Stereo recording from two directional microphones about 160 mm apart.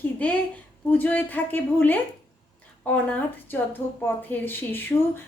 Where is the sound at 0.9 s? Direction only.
10° left (ahead or behind).